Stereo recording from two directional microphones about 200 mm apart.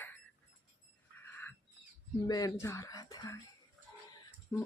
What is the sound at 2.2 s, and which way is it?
A woman's voice, 20° left (ahead or behind).